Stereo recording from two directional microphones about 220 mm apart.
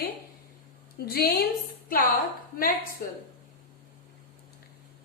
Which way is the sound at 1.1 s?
45° left (ahead or behind).